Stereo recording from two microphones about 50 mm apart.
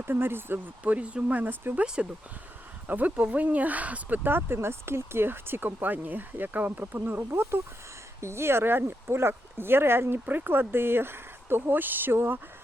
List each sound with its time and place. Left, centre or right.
0.0 s speech: right
0.9 s speech: right
2.0 s speech: centre
2.8 s speech: right
4.2 s speech: right
10.2 s speech: right